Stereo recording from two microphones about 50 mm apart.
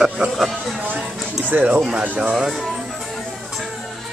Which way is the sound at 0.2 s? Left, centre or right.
Centre.